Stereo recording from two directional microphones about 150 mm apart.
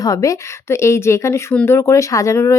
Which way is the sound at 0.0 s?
25° left (ahead or behind).